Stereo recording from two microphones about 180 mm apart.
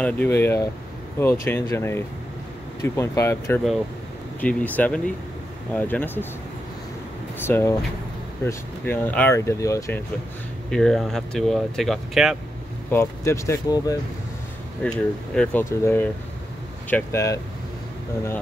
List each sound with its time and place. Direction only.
0.0 s speech: 10° left (ahead or behind)
7.4 s speech: 10° left (ahead or behind)
10.7 s speech: centre (ahead or behind)
12.9 s speech: 15° left (ahead or behind)
14.8 s speech: 5° left (ahead or behind)